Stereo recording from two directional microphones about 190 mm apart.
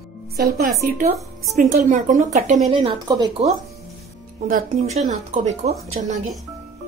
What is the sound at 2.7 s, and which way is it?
Speech, 30° right (ahead or behind).